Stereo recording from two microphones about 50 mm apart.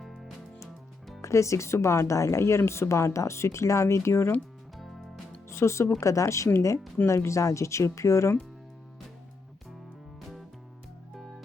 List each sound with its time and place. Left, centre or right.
1.2 s speech: left
5.5 s speech: left
6.0 s speech: left
11.2 s music: centre